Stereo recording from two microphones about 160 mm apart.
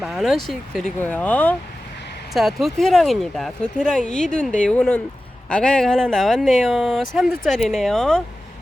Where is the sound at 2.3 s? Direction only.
Centre (ahead or behind).